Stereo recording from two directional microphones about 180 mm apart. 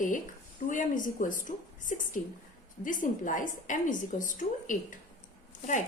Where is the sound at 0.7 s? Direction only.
45° left (ahead or behind).